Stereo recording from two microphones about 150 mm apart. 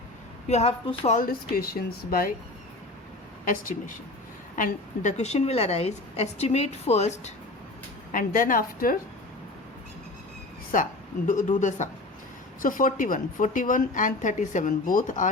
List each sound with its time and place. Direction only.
0.4 s a woman's voice: 45° left (ahead or behind)
1.2 s speech: 80° left
3.4 s a woman's voice: 65° left (ahead or behind); by 7.3 s 45° left (ahead or behind)
8.1 s a woman's voice: 65° left (ahead or behind)
11.3 s a woman's voice: 55° left (ahead or behind)